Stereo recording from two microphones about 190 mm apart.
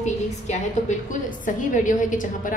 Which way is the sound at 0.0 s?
40° left (ahead or behind).